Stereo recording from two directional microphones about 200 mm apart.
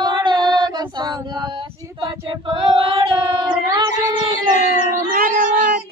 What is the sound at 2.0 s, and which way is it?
Singing, 25° right (ahead or behind).